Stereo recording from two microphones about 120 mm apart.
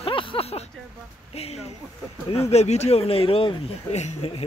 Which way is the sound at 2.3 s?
60° left (ahead or behind).